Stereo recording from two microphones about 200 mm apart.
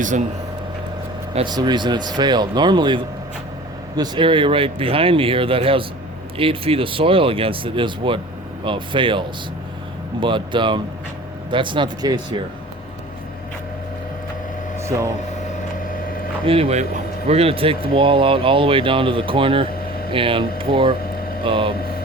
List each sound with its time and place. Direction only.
1.4 s speech: 20° right (ahead or behind)
14.8 s speech: 15° right (ahead or behind)
16.5 s speech: 30° right (ahead or behind)